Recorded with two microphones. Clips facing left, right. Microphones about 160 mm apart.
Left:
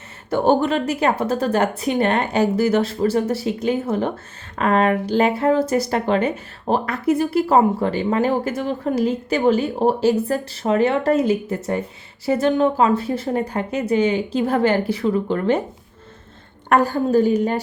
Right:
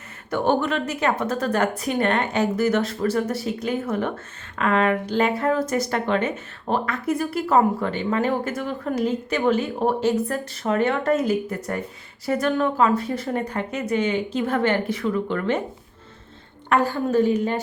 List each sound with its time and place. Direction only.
0.3 s speech: 30° left (ahead or behind)
16.6 s speech: 40° left (ahead or behind)